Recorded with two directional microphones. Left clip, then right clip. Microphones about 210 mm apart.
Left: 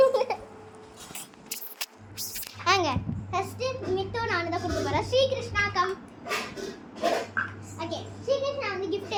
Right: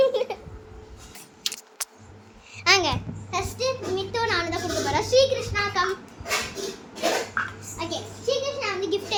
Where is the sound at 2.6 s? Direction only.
20° right (ahead or behind).